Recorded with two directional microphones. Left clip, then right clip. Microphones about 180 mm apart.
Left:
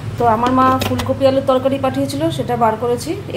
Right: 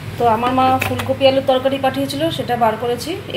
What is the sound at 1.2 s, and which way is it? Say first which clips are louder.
A woman's voice: even; 10° left (ahead or behind).